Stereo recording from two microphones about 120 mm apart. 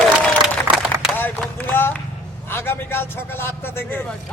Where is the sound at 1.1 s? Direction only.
15° left (ahead or behind).